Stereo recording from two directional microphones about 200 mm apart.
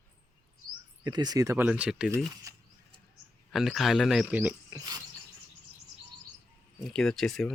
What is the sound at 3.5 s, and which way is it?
Speech, centre (ahead or behind).